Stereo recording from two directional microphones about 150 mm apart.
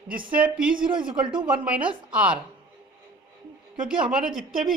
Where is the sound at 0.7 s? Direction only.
30° right (ahead or behind).